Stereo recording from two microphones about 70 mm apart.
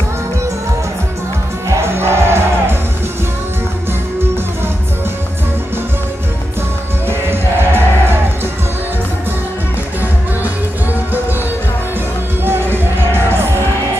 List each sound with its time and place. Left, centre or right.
1.7 s music: right
7.1 s music: right
12.4 s music: right